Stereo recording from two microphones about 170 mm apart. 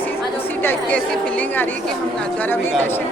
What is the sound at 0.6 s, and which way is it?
Speech, 10° left (ahead or behind).